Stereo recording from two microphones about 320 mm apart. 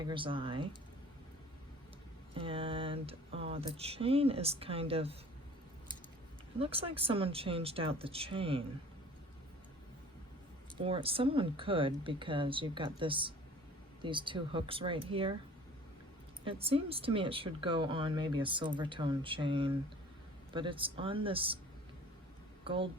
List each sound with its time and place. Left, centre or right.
0.0 s speech: centre
2.3 s speech: centre
6.6 s speech: centre
10.8 s speech: centre
16.4 s speech: centre
22.6 s speech: centre